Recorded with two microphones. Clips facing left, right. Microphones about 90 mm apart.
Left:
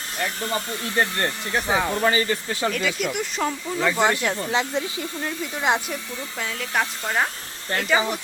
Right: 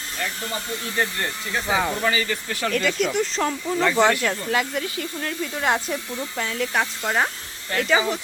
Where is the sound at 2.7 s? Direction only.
5° left (ahead or behind).